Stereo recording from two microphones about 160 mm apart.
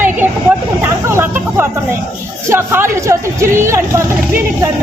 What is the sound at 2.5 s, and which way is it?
Speech, 15° right (ahead or behind).